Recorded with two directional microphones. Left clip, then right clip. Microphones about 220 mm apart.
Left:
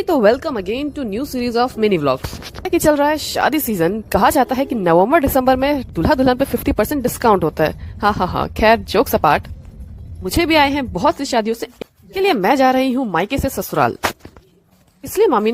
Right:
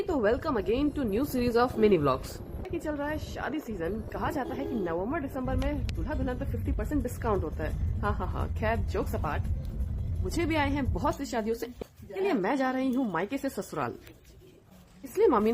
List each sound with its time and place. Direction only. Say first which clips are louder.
0.0 s a woman's voice: left 13 dB; 35° left (ahead or behind)
2.6 s a woman's voice: left 19 dB; 50° left (ahead or behind)
15.2 s a woman's voice: left 10 dB; 35° left (ahead or behind)